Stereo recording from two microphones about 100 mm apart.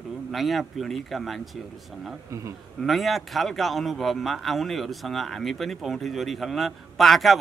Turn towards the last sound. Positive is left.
turn(degrees=0)  # may be behind; listen again after turning